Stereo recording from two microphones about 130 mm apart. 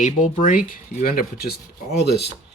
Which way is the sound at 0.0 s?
85° left.